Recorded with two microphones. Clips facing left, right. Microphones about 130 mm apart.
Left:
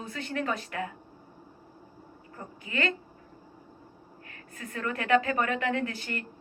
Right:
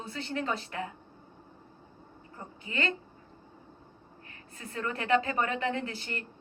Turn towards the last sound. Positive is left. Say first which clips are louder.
# left 3 dB
turn(degrees=-30)  # may be behind; listen again after turning